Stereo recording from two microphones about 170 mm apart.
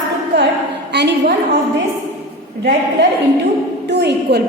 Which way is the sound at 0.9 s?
80° right.